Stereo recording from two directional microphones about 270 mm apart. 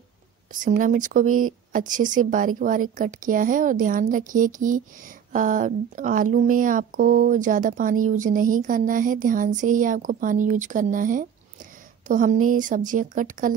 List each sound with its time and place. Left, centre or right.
0.5 s speech: right